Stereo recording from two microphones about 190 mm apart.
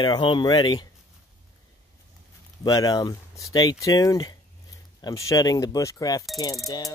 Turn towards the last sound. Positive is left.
turn(degrees=20)  # may be behind; listen again after turning